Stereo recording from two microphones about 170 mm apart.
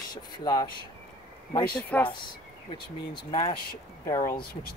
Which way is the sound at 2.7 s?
30° left (ahead or behind).